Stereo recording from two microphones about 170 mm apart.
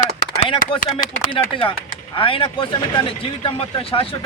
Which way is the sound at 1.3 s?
30° left (ahead or behind).